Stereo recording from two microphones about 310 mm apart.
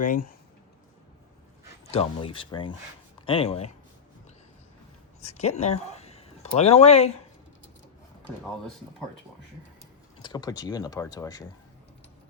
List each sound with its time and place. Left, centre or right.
0.0 s speech: left
1.9 s speech: centre
5.3 s speech: left
5.9 s a sound: centre
10.2 s speech: centre